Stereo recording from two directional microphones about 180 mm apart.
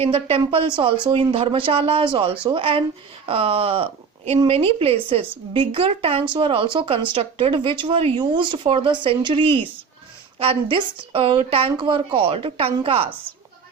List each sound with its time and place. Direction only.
0.0 s speech: 30° right (ahead or behind)